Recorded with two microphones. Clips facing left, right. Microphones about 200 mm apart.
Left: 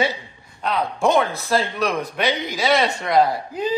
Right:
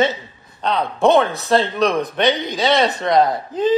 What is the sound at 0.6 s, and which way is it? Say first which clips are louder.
A man's voice: right 4 dB; 30° right (ahead or behind).